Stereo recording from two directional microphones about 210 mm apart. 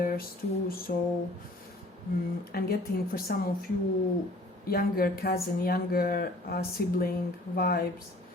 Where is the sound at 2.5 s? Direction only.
45° left (ahead or behind).